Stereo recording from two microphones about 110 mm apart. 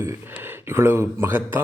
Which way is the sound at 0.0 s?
20° right (ahead or behind).